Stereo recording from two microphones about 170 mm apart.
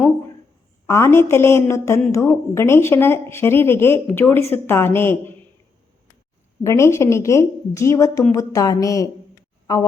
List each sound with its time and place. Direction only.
0.9 s speech: 15° left (ahead or behind)
6.6 s a woman's voice: 15° left (ahead or behind)